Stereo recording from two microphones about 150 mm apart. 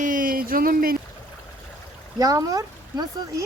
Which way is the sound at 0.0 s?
65° right (ahead or behind).